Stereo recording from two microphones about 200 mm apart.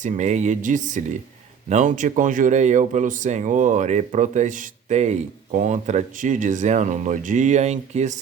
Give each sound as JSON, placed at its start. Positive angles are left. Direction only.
{"t": 0.0, "sound": "speech", "side_deg": -35}